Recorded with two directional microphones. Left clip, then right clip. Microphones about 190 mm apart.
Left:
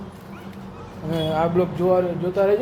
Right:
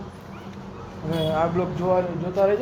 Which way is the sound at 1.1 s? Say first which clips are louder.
Left 1 dB; 25° left (ahead or behind).